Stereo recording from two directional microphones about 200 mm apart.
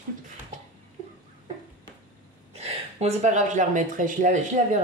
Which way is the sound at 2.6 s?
35° right (ahead or behind).